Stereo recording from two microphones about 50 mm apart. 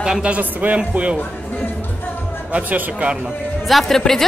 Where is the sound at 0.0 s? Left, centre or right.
Centre.